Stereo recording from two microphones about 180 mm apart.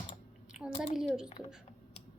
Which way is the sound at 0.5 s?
Centre (ahead or behind).